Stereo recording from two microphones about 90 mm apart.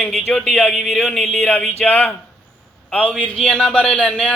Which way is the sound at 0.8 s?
Centre (ahead or behind).